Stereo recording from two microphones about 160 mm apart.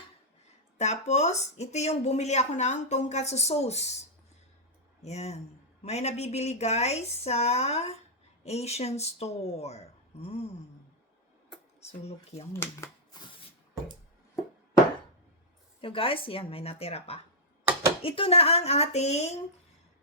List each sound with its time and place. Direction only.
0.8 s speech: 45° left (ahead or behind)
5.0 s speech: 45° left (ahead or behind)
11.9 s speech: 40° left (ahead or behind)
12.8 s shuffling cards: 25° left (ahead or behind)
15.8 s speech: 35° left (ahead or behind)